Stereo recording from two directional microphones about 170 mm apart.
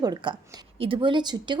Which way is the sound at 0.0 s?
25° right (ahead or behind).